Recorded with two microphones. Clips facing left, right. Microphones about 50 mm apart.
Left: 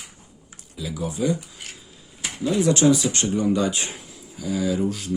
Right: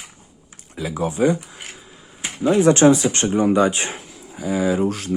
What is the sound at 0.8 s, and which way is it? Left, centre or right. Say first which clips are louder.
Speech: right 6 dB; right.